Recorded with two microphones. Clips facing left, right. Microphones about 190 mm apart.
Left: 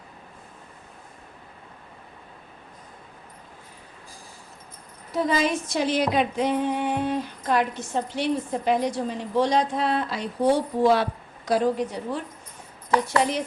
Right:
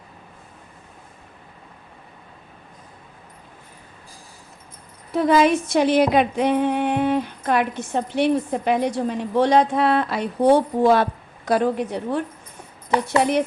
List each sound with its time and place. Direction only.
5.1 s music: 60° right (ahead or behind)